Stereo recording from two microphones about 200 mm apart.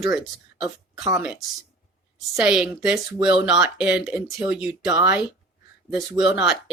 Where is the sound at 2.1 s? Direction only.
5° right (ahead or behind).